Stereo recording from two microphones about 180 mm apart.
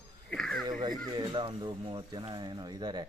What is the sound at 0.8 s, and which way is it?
Speech, 25° right (ahead or behind).